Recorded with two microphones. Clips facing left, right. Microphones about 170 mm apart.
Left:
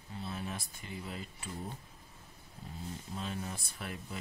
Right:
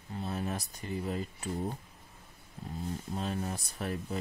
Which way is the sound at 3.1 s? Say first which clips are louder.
Right 4 dB; 40° right (ahead or behind).